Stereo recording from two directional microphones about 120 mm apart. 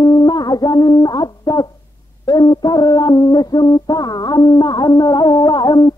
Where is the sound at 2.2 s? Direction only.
35° left (ahead or behind).